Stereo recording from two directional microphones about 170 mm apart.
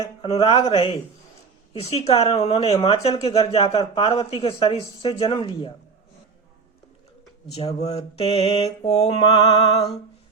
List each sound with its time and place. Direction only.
0.0 s speech: 35° left (ahead or behind)
7.8 s speech: 40° left (ahead or behind)